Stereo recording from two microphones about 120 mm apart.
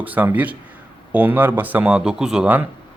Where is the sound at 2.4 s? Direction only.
15° right (ahead or behind).